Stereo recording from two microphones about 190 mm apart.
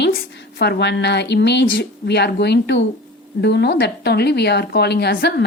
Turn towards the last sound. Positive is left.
turn(degrees=55)  # may be behind; listen again after turning